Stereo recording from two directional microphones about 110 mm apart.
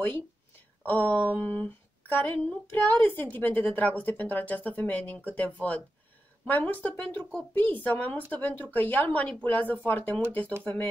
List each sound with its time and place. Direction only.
0.8 s a woman's voice: 15° left (ahead or behind)